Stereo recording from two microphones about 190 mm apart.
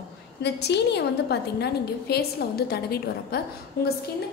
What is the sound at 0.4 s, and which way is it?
A woman's voice, 60° left (ahead or behind).